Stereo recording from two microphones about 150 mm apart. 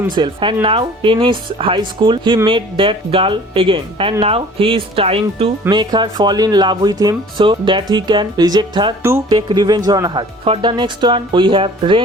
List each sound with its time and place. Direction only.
0.2 s speech: 35° right (ahead or behind)
5.6 s speech: 30° right (ahead or behind)